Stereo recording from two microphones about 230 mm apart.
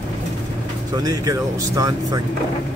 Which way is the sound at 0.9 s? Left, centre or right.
Centre.